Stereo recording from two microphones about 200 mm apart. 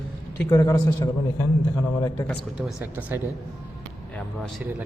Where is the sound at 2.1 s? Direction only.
5° left (ahead or behind).